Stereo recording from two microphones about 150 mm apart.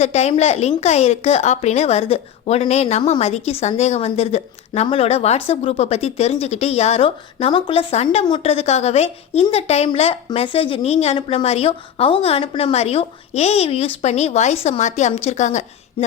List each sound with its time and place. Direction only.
0.0 s a woman's voice: 45° left (ahead or behind)